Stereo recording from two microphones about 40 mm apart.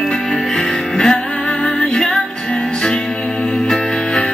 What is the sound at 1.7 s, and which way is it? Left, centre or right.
Music, centre.